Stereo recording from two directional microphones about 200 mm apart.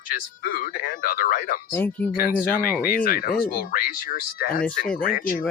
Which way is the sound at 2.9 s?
45° left (ahead or behind).